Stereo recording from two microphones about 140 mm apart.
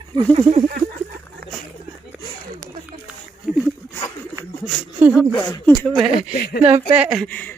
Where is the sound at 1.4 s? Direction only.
90° right.